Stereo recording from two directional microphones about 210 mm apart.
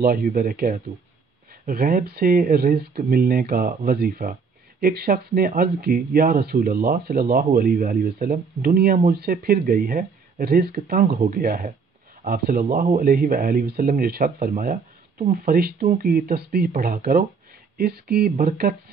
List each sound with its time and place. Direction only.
0.0 s speech: 45° right (ahead or behind)